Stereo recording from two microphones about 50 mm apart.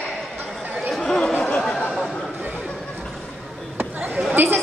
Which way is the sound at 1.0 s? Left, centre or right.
Centre.